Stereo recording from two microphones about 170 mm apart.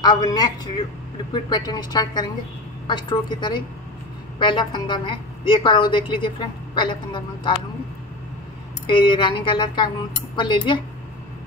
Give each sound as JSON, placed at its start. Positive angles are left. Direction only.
{"t": 0.0, "sound": "a woman's voice", "side_deg": 25}
{"t": 8.8, "sound": "a woman's voice", "side_deg": 30}